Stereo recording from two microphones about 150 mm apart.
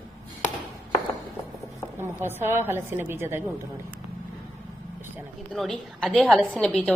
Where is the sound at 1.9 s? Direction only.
15° right (ahead or behind).